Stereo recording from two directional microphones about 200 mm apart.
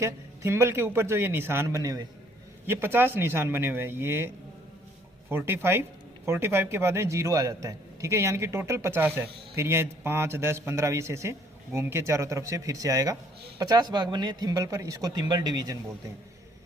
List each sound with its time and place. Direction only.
0.0 s a man's voice: 15° right (ahead or behind)
5.3 s a man's voice: 10° right (ahead or behind)